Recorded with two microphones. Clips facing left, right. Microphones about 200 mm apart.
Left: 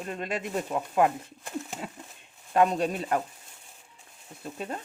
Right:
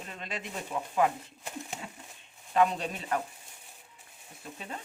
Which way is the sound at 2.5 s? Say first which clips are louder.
Left 3 dB; 45° left (ahead or behind).